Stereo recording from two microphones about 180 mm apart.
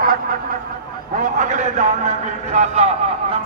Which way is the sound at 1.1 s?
45° right (ahead or behind).